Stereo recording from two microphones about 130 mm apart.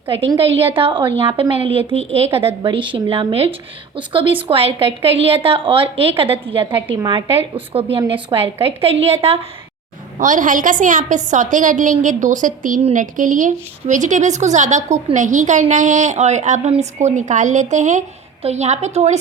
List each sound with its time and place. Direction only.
0.3 s a woman's voice: 45° right (ahead or behind)
10.2 s a woman's voice: 85° right
12.8 s a woman's voice: 75° right (ahead or behind)
18.4 s a woman's voice: 60° right (ahead or behind)